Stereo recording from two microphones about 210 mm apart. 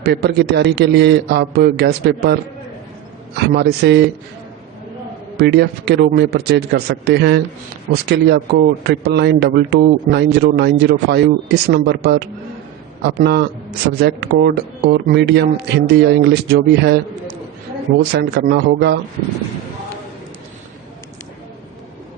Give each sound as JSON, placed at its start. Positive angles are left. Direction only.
{"t": 0.0, "sound": "speech", "side_deg": -50}
{"t": 3.5, "sound": "speech", "side_deg": -50}
{"t": 5.4, "sound": "speech", "side_deg": -50}
{"t": 18.1, "sound": "speech", "side_deg": -50}